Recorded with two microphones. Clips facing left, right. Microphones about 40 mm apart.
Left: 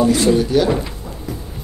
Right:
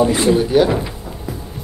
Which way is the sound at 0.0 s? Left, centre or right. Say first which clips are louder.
Even; right.